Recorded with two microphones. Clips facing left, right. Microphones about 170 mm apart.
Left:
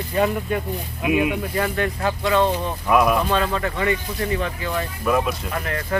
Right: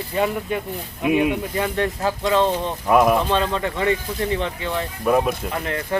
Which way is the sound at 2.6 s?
25° right (ahead or behind).